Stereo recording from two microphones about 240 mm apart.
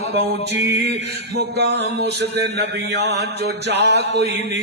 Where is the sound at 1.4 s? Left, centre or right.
Right.